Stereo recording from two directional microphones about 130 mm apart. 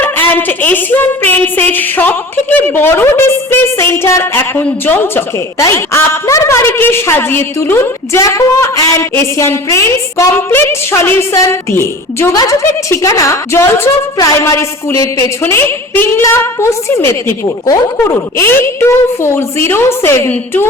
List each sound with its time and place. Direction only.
0.0 s a woman's voice: 15° left (ahead or behind)